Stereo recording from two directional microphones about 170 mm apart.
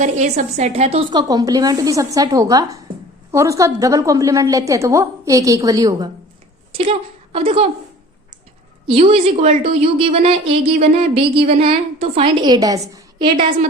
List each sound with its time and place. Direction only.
0.0 s a woman's voice: 45° right (ahead or behind)
1.1 s a woman's voice: 20° right (ahead or behind)
7.3 s a woman's voice: 35° right (ahead or behind)
8.9 s a woman's voice: 35° right (ahead or behind)